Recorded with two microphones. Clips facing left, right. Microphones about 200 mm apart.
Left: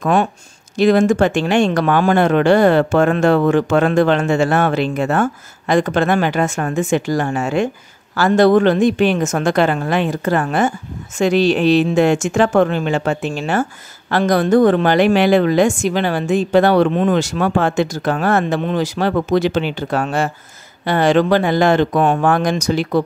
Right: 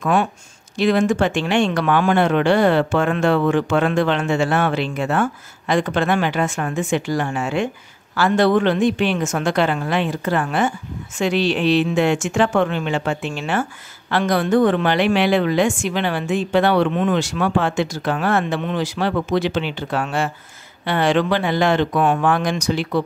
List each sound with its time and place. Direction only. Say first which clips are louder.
0.0 s speech: left 3 dB; 40° left (ahead or behind)